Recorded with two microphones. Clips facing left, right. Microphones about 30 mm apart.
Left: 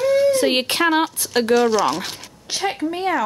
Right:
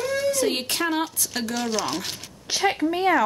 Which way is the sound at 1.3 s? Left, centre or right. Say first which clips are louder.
Left 12 dB; left.